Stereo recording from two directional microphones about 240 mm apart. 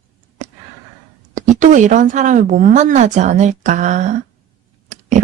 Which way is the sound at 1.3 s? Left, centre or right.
Right.